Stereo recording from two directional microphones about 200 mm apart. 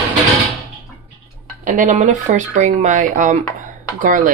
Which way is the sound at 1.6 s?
40° right (ahead or behind).